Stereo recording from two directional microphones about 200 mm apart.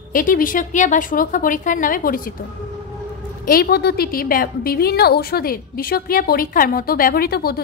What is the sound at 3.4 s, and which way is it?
A woman's voice, 50° left (ahead or behind).